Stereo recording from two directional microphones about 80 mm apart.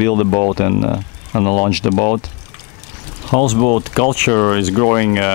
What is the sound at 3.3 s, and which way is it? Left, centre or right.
Speech, centre.